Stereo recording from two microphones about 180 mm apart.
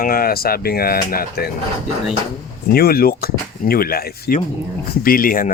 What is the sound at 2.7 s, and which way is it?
A man's voice, 60° left (ahead or behind).